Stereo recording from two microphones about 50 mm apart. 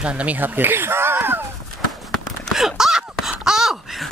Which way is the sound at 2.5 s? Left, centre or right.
Centre.